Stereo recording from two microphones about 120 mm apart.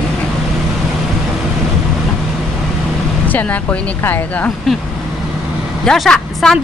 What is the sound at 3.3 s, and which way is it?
Speech, 15° left (ahead or behind).